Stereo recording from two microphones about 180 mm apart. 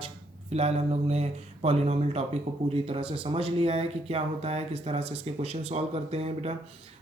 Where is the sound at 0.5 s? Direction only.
35° right (ahead or behind).